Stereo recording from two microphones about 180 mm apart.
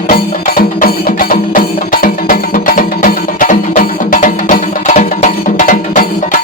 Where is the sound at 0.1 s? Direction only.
55° left (ahead or behind).